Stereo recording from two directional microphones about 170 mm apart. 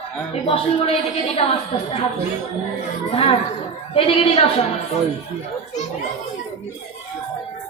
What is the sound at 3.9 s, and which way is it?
Speech, 35° left (ahead or behind).